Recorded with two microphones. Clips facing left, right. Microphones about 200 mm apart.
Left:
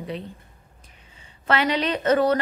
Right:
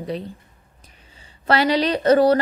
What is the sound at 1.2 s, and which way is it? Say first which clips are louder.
A woman's voice: right 4 dB; 35° right (ahead or behind).